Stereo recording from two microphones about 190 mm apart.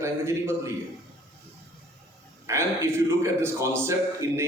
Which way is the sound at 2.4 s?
15° right (ahead or behind).